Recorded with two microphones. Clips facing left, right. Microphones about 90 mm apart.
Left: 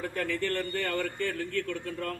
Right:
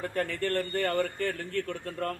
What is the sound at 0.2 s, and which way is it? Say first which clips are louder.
Speech: right 2 dB; 35° right (ahead or behind).